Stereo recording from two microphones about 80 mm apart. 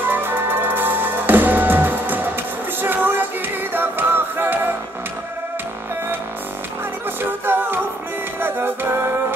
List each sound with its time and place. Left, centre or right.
0.0 s music: right
7.2 s music: right